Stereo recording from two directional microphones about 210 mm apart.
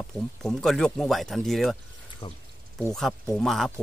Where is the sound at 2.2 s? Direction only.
25° left (ahead or behind).